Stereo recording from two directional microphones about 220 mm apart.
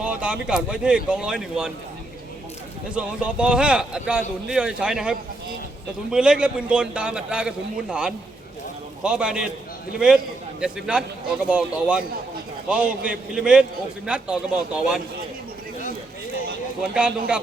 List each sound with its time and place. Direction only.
0.0 s a man's voice: 5° right (ahead or behind)
2.9 s a man's voice: 5° right (ahead or behind)
10.6 s a man's voice: 5° right (ahead or behind)
16.9 s a man's voice: 5° right (ahead or behind)